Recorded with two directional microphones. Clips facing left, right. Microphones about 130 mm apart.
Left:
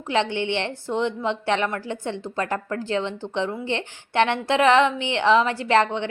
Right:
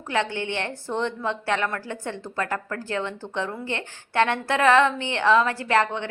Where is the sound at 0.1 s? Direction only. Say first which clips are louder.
Left 3 dB; 20° left (ahead or behind).